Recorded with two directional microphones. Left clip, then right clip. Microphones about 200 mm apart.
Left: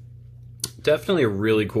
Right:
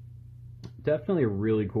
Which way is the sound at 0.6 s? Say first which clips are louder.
Left 7 dB; 5° left (ahead or behind).